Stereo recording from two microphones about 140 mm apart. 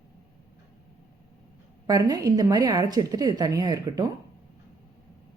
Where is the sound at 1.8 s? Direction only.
25° right (ahead or behind).